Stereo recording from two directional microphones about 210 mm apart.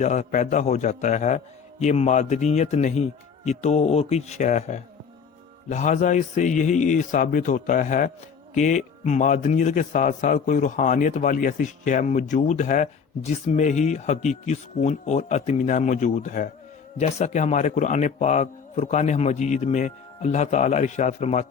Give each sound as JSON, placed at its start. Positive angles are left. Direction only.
{"t": 0.0, "sound": "a man's voice", "side_deg": 35}